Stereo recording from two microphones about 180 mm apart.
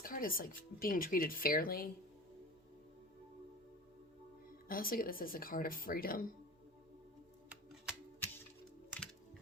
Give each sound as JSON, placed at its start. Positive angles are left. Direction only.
{"t": 0.0, "sound": "speech", "side_deg": 50}
{"t": 4.7, "sound": "speech", "side_deg": 55}
{"t": 7.5, "sound": "music", "side_deg": -5}